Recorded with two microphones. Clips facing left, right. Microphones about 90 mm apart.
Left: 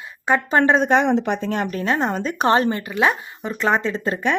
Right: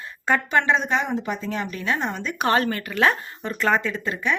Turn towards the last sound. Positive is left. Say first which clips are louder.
# left 2 dB
turn(degrees=30)  # may be behind; listen again after turning